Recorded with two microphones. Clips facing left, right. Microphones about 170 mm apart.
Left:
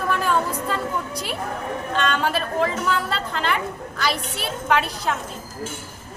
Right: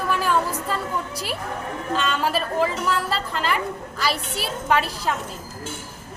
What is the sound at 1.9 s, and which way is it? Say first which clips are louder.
A woman's voice: even; centre (ahead or behind).